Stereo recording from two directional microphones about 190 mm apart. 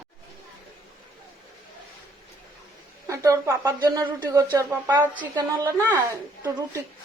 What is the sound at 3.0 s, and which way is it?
Speech, 15° right (ahead or behind).